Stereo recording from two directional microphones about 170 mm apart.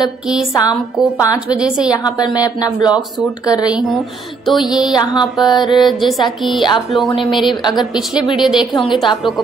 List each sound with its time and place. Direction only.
0.0 s a woman's voice: centre (ahead or behind)
0.6 s speech: 20° left (ahead or behind)
1.5 s a woman's voice: 5° right (ahead or behind)
2.0 s speech: 20° left (ahead or behind)
3.6 s a woman's voice: centre (ahead or behind)
4.8 s speech: 25° left (ahead or behind)
5.7 s a woman's voice: centre (ahead or behind)
6.6 s speech: 25° left (ahead or behind)
7.2 s a woman's voice: centre (ahead or behind)